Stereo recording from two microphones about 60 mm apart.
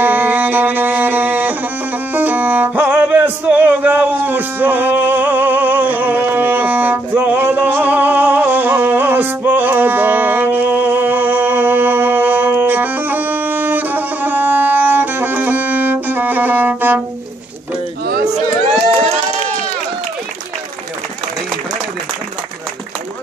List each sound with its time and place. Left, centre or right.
0.0 s music: right